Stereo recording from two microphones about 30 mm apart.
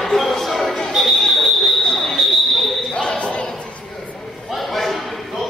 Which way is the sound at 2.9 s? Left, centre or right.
Left.